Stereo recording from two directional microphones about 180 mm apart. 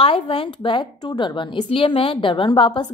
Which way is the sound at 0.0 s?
30° left (ahead or behind).